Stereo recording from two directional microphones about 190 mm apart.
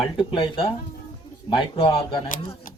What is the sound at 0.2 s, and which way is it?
Speech, 30° left (ahead or behind).